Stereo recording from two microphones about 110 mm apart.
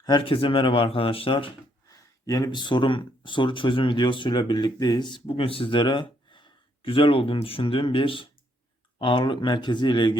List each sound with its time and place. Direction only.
0.0 s speech: 45° left (ahead or behind)
2.2 s speech: 30° left (ahead or behind)